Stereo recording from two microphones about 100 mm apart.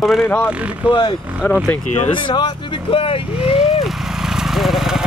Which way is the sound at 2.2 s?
50° left (ahead or behind).